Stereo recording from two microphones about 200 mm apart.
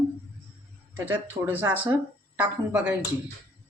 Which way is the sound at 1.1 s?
10° right (ahead or behind).